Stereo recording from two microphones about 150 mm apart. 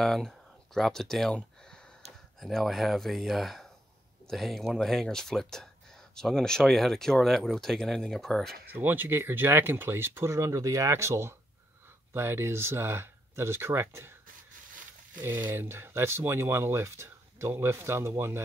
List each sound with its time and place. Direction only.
0.0 s speech: 5° left (ahead or behind)
8.7 s speech: 10° right (ahead or behind)
15.2 s speech: 15° right (ahead or behind)